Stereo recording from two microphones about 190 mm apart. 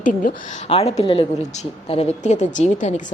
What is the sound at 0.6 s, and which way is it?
A woman's voice, 30° left (ahead or behind).